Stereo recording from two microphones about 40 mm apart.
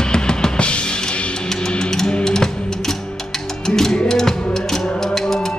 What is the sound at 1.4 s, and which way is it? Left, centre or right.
Music, centre.